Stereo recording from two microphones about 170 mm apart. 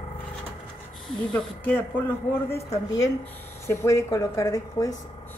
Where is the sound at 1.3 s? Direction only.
5° left (ahead or behind).